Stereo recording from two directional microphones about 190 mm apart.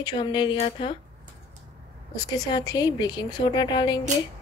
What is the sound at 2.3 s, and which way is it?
Speech, 20° left (ahead or behind).